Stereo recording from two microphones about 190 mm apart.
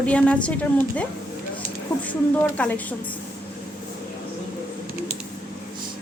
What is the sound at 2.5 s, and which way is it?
Speech, 10° left (ahead or behind).